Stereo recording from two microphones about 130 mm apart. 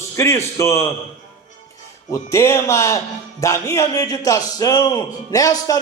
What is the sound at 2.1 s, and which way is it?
A man's voice, 25° left (ahead or behind).